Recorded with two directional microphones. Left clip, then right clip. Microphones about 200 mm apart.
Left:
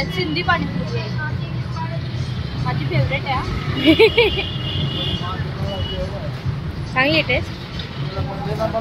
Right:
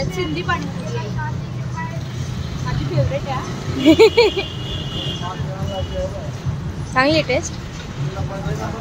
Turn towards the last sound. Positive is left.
turn(degrees=-15)  # may be behind; listen again after turning